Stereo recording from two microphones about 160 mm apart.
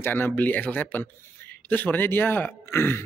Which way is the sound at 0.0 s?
10° left (ahead or behind).